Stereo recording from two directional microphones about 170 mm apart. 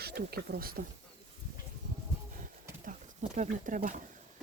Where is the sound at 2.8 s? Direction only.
50° right (ahead or behind).